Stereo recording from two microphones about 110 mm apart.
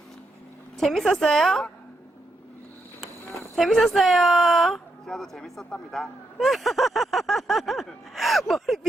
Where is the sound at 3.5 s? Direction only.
Centre (ahead or behind).